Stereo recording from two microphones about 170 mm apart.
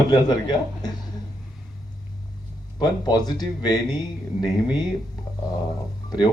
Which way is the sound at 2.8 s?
25° left (ahead or behind).